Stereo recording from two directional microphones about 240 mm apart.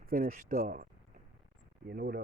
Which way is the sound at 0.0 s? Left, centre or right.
Right.